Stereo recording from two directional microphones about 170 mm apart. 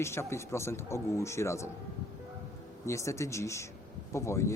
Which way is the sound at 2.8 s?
15° left (ahead or behind).